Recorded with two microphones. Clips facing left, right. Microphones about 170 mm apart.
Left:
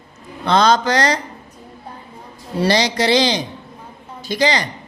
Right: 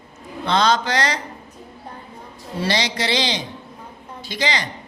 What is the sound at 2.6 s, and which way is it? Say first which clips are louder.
Speech: left 6 dB; 40° left (ahead or behind).